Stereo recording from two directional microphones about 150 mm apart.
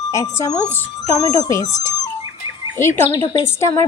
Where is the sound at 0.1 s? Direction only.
20° left (ahead or behind).